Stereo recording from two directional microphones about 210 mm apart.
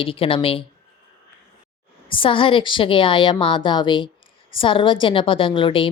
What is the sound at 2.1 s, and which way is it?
A woman's voice, 25° left (ahead or behind).